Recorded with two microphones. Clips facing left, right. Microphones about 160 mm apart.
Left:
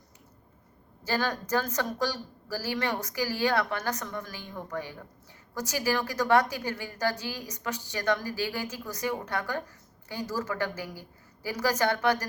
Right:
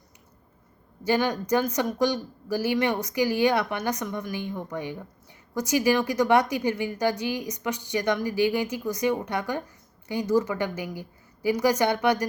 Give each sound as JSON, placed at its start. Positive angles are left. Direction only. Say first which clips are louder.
{"t": 1.0, "sound": "a woman's voice", "louder": "right 6 dB", "side_deg": -15}